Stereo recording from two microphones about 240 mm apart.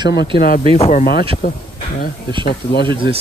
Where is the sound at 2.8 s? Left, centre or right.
Right.